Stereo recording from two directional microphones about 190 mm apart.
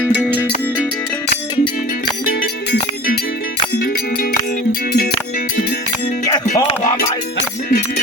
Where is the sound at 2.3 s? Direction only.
50° left (ahead or behind).